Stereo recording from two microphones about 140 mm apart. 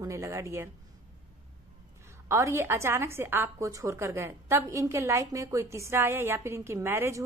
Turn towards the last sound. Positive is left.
turn(degrees=-20)  # may be behind; listen again after turning